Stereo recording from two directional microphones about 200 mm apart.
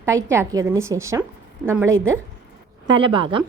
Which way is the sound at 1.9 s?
75° right (ahead or behind).